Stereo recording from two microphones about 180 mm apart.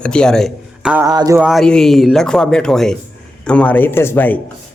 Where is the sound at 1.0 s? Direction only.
20° right (ahead or behind).